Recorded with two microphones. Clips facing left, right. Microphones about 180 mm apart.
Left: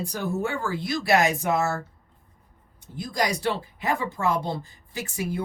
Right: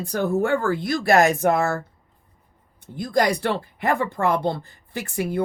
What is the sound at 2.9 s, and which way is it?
Speech, 55° right (ahead or behind).